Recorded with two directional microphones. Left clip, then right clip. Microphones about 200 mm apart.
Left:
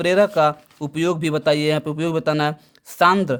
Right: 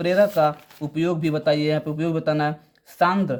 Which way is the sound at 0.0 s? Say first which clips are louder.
Left 2 dB; 45° left (ahead or behind).